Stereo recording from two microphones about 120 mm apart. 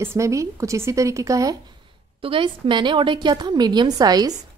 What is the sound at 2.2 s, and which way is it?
A woman's voice, 45° right (ahead or behind).